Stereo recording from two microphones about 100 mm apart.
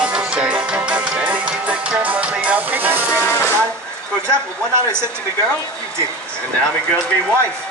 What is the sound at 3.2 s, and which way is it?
Speech, 25° left (ahead or behind).